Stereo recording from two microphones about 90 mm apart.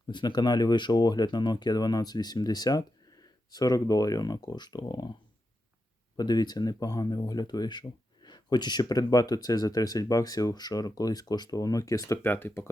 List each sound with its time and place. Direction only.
0.1 s speech: 55° left (ahead or behind)
6.1 s speech: 50° left (ahead or behind); by 12.7 s 25° left (ahead or behind)